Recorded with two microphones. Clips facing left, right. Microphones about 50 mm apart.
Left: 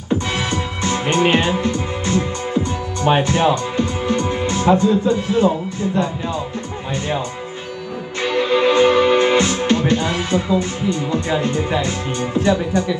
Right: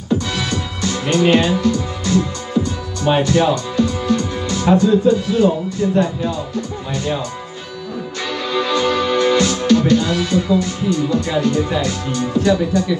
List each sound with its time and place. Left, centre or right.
0.1 s music: left
8.2 s music: left